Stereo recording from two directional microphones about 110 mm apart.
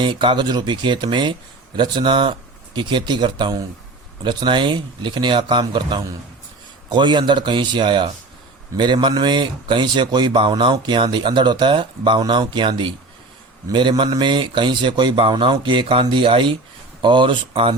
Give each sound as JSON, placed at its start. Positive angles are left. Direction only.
{"t": 0.0, "sound": "speech", "side_deg": -45}